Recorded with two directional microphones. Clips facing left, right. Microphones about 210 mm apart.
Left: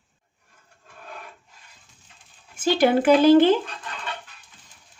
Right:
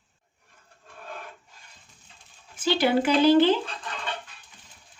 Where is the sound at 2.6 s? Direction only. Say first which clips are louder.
Left 4 dB; 50° left (ahead or behind).